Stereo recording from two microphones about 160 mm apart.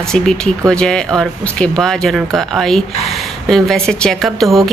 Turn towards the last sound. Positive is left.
turn(degrees=0)  # may be behind; listen again after turning